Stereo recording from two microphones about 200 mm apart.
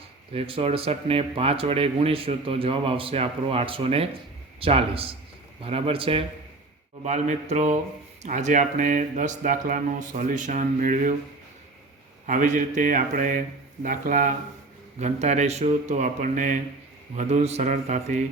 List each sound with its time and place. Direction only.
0.3 s speech: 30° right (ahead or behind)
12.2 s speech: 40° right (ahead or behind)